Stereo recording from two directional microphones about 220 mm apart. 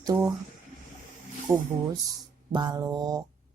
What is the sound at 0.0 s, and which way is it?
Speech, 15° right (ahead or behind).